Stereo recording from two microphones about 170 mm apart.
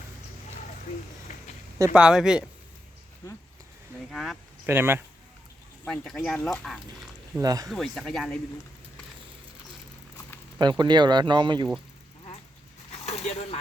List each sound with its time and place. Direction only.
1.9 s speech: 5° right (ahead or behind)
3.2 s speech: 20° left (ahead or behind)
4.1 s speech: centre (ahead or behind)
4.6 s speech: 15° right (ahead or behind)
5.8 s speech: 5° left (ahead or behind)
7.3 s speech: 20° right (ahead or behind)
7.7 s speech: centre (ahead or behind)
10.6 s speech: 25° right (ahead or behind)
12.9 s a sound: 40° left (ahead or behind)